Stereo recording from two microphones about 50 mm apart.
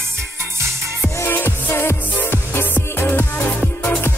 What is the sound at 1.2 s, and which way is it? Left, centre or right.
Music, left.